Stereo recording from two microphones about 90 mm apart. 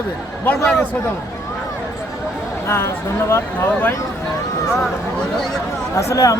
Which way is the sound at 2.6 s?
30° left (ahead or behind).